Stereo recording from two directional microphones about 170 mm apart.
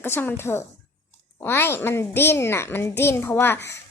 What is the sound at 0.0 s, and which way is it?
A child's voice, 15° left (ahead or behind).